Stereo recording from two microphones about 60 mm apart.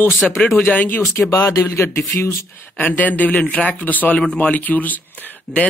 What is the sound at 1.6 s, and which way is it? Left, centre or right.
Speech, left.